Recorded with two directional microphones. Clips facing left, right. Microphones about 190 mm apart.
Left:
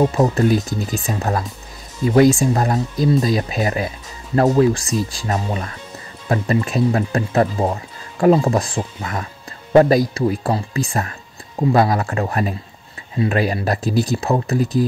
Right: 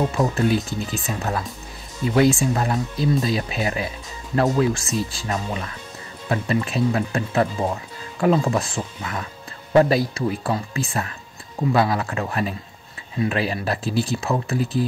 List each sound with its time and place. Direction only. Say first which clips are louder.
0.2 s speech: left 4 dB; 40° left (ahead or behind)